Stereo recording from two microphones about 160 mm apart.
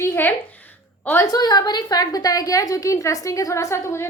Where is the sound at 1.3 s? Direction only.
25° left (ahead or behind).